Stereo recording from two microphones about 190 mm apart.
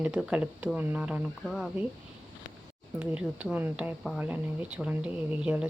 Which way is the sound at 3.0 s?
10° right (ahead or behind).